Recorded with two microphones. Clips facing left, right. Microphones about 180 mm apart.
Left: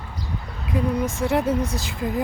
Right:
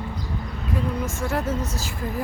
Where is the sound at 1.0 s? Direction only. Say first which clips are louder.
Left 4 dB; 20° left (ahead or behind).